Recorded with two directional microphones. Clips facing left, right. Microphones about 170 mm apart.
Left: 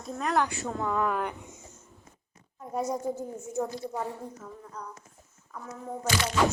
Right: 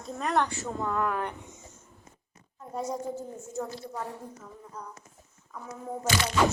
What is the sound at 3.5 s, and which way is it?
Speech, 15° left (ahead or behind).